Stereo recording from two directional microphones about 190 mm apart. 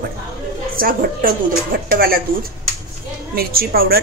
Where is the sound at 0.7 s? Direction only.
50° right (ahead or behind).